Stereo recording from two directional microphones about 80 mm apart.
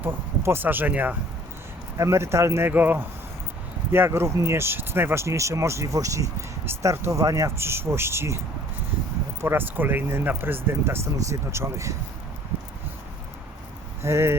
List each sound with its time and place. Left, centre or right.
0.0 s speech: right
2.0 s speech: right
2.6 s speech: right
9.4 s speech: right
14.0 s speech: right